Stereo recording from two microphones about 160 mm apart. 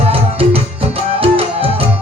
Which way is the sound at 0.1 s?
35° right (ahead or behind).